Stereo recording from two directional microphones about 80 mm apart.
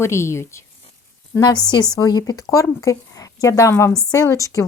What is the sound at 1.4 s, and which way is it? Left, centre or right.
Speech, left.